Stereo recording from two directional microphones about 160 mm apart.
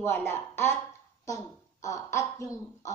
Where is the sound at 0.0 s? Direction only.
15° left (ahead or behind).